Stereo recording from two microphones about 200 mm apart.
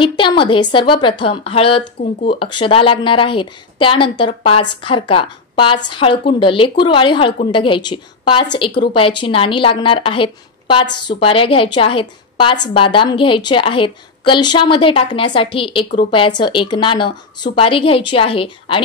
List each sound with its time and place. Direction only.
0.0 s a woman's voice: 25° left (ahead or behind)